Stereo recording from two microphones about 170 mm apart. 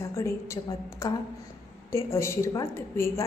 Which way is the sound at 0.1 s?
15° left (ahead or behind).